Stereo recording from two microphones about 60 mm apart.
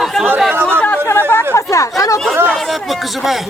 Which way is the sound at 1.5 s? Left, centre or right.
Left.